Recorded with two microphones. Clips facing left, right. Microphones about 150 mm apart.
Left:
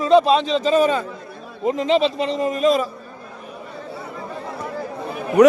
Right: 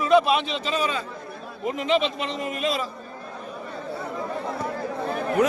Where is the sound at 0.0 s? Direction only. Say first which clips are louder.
Left 4 dB; 30° left (ahead or behind).